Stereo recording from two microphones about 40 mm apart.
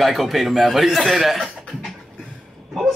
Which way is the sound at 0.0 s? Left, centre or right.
Centre.